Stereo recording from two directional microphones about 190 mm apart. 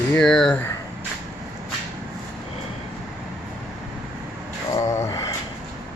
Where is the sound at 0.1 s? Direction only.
5° left (ahead or behind).